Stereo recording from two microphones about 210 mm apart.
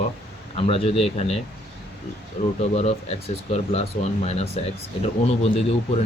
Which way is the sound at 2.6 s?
30° left (ahead or behind).